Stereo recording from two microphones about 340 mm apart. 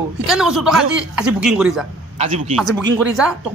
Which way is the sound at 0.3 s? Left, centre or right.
Centre.